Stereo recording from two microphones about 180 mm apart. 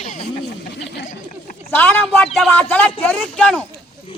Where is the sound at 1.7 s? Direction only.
10° left (ahead or behind).